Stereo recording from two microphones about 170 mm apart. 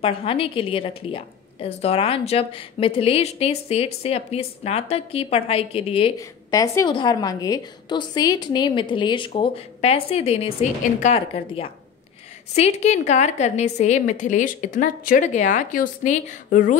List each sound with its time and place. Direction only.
0.0 s a woman's voice: 35° left (ahead or behind)
6.1 s a woman's voice: 20° left (ahead or behind); by 16.7 s 50° left (ahead or behind)